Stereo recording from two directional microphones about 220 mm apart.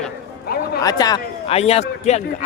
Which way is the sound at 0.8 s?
15° left (ahead or behind).